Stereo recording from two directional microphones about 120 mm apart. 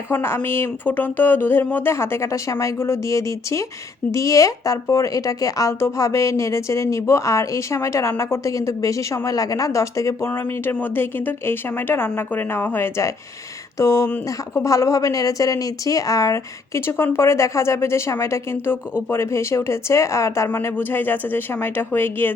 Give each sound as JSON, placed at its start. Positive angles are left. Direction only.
{"t": 0.1, "sound": "speech", "side_deg": 20}